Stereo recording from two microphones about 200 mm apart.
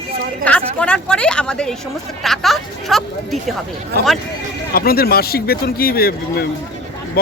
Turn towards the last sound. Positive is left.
turn(degrees=50)  # may be behind; listen again after turning